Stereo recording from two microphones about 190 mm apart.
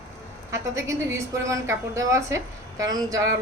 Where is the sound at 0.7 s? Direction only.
15° right (ahead or behind).